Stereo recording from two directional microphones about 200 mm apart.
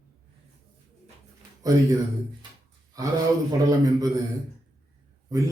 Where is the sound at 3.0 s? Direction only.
15° right (ahead or behind).